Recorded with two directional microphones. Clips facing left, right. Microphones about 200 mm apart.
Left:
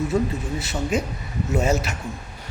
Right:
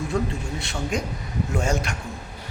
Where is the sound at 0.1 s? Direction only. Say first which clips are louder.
Left 3 dB; 5° left (ahead or behind).